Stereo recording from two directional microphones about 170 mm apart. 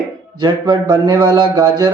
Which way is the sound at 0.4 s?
25° right (ahead or behind).